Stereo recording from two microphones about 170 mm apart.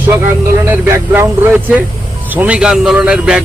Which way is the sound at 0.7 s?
15° right (ahead or behind).